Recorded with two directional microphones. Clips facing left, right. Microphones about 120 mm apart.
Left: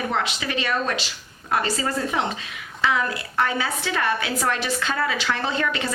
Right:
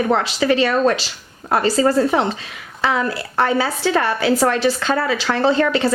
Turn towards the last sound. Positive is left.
turn(degrees=-35)  # may be behind; listen again after turning